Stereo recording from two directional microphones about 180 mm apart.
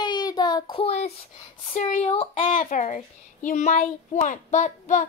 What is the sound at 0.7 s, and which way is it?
A child's voice, 35° left (ahead or behind).